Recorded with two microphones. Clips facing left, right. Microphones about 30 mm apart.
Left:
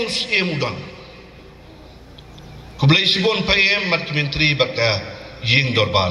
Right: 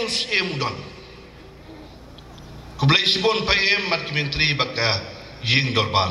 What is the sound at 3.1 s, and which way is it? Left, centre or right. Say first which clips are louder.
A man's voice: left 3 dB; centre.